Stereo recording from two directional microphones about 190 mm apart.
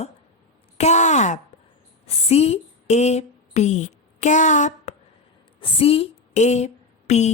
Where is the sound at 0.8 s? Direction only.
35° left (ahead or behind).